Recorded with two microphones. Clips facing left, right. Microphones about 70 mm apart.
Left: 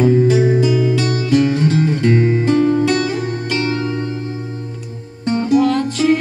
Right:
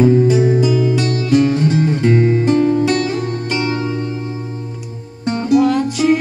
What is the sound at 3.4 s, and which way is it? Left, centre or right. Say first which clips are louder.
Music: left 1 dB; right.